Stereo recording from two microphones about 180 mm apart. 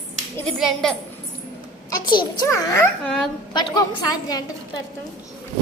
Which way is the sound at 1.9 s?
25° left (ahead or behind).